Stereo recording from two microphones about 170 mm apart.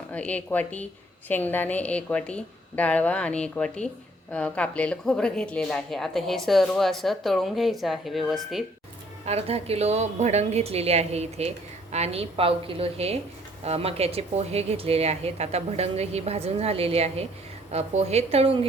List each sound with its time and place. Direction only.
0.1 s a woman's voice: 10° left (ahead or behind)
9.2 s a woman's voice: 35° right (ahead or behind)